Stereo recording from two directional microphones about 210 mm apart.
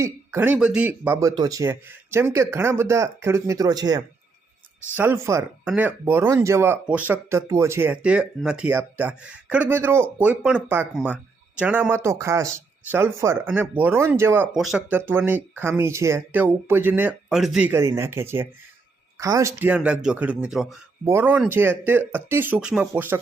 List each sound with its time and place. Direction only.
0.0 s speech: 10° right (ahead or behind)